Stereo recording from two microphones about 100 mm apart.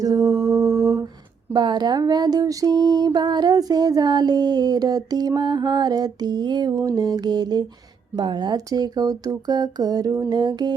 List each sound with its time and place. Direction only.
0.0 s mantra: 40° right (ahead or behind)
1.5 s a sound: 45° right (ahead or behind)
6.7 s speech: 35° right (ahead or behind)